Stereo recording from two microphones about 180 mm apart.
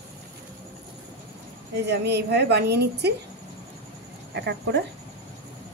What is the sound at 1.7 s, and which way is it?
A woman's voice, 70° right (ahead or behind).